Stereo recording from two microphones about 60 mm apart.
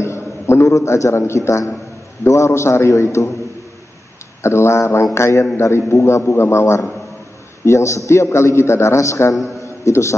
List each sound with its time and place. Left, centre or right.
0.0 s a man's voice: left
2.9 s a man's voice: left
4.4 s a man's voice: left